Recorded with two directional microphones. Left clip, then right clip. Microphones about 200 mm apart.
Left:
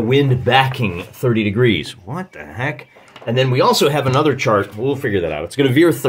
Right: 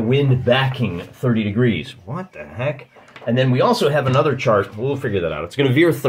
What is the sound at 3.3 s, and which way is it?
Speech, 50° left (ahead or behind).